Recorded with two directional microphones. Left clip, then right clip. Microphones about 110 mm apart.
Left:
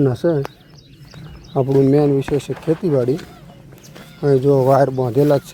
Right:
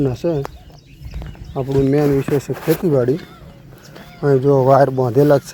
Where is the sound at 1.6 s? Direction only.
40° left (ahead or behind).